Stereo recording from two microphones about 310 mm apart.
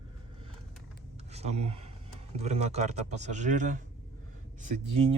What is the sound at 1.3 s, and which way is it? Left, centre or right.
Speech, right.